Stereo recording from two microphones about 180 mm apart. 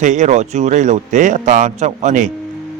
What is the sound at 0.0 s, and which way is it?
A man's voice, 45° right (ahead or behind).